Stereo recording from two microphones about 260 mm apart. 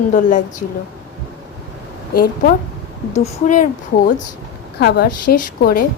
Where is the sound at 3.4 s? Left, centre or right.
Left.